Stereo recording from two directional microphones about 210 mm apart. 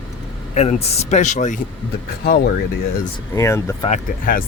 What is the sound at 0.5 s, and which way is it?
Speech, 30° left (ahead or behind).